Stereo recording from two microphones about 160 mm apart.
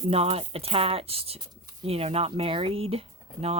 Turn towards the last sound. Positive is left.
turn(degrees=-40)  # may be behind; listen again after turning